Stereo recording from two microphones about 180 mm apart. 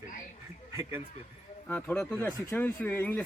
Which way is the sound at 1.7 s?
5° left (ahead or behind).